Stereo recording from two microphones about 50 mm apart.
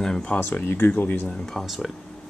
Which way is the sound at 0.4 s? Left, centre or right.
Left.